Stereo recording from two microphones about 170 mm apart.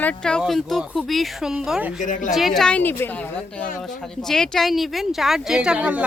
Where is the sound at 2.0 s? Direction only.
50° left (ahead or behind).